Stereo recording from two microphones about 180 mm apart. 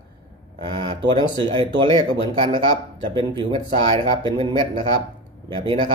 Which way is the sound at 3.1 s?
30° right (ahead or behind).